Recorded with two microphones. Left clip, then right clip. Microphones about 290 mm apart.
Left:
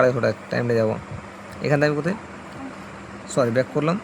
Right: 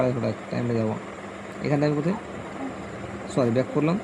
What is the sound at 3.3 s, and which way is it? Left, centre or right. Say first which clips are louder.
Speech: left 3 dB; centre.